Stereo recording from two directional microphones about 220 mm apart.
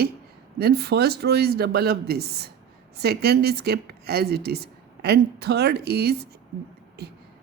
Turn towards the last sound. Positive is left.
turn(degrees=-45)  # may be behind; listen again after turning